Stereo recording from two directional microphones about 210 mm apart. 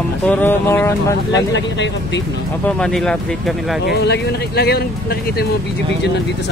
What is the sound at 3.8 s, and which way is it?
Speech, 50° left (ahead or behind).